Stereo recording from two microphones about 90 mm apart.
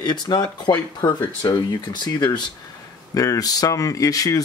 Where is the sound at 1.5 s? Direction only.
60° left (ahead or behind).